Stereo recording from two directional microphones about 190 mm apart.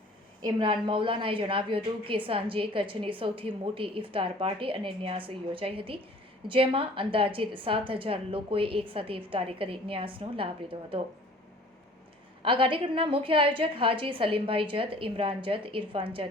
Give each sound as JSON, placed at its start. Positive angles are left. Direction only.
{"t": 0.4, "sound": "a woman's voice", "side_deg": -25}
{"t": 12.4, "sound": "a woman's voice", "side_deg": -25}